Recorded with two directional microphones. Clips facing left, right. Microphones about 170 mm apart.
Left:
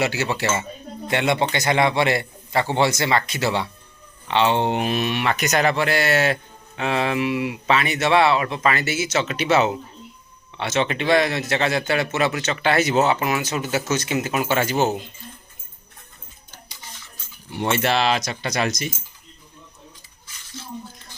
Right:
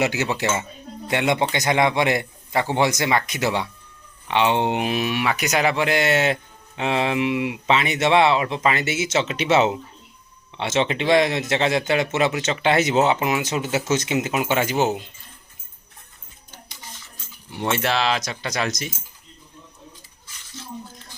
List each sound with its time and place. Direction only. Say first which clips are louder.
0.0 s a man's voice: right 1 dB; 20° right (ahead or behind)
17.5 s speech: left 2 dB; centre (ahead or behind)